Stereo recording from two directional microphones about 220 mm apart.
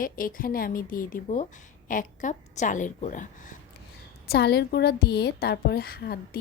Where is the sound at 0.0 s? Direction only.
40° left (ahead or behind).